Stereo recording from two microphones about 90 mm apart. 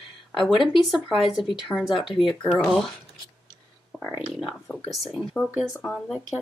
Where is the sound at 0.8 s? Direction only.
Centre (ahead or behind).